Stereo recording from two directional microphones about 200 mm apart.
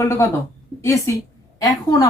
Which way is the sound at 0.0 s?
15° left (ahead or behind).